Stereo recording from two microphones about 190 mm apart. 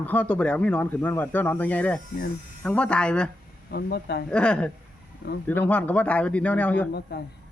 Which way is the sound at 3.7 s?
55° left (ahead or behind).